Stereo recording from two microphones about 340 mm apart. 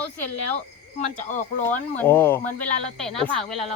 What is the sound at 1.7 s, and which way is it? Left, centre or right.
Speech, centre.